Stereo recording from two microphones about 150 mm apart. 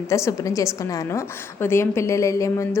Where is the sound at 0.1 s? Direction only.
20° left (ahead or behind).